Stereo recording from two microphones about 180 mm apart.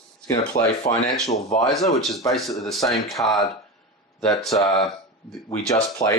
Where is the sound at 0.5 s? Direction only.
50° left (ahead or behind).